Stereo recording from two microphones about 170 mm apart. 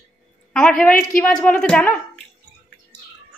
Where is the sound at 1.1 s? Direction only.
5° left (ahead or behind).